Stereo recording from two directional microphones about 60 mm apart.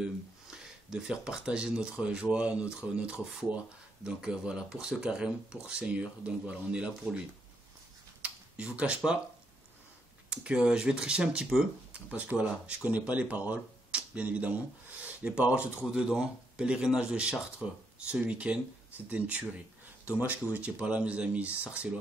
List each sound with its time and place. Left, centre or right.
0.5 s speech: centre
8.2 s speech: centre
10.3 s speech: centre